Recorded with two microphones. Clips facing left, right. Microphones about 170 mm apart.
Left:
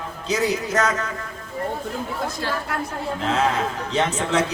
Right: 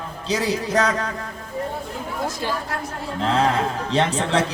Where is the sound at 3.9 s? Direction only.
35° right (ahead or behind).